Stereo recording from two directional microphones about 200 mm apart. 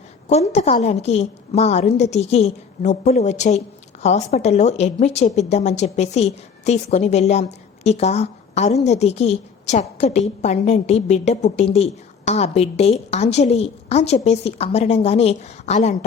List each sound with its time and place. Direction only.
0.3 s a woman's voice: 35° left (ahead or behind)